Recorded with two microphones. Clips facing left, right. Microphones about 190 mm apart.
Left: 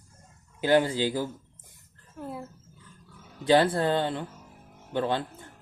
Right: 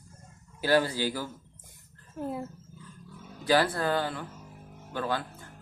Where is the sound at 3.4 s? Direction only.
25° left (ahead or behind).